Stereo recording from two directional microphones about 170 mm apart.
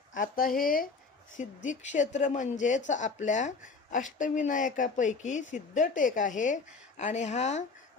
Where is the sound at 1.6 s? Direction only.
45° left (ahead or behind).